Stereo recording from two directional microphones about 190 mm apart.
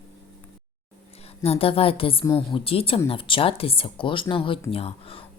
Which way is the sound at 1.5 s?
30° left (ahead or behind).